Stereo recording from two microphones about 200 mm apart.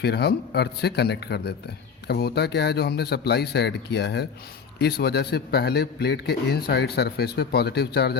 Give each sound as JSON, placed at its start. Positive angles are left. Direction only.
{"t": 0.0, "sound": "a man's voice", "side_deg": 55}